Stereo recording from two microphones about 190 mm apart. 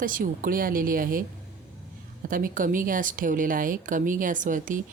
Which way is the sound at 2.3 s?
45° right (ahead or behind).